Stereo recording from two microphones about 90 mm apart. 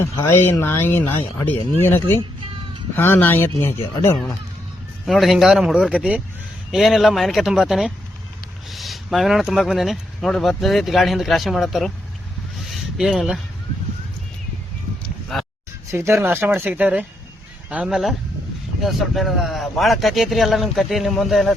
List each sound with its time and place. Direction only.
0.0 s speech: 30° left (ahead or behind)
5.0 s speech: centre (ahead or behind)
6.7 s speech: centre (ahead or behind)
12.6 s a sound: 5° right (ahead or behind)
15.9 s speech: 30° right (ahead or behind); by 21.5 s centre (ahead or behind)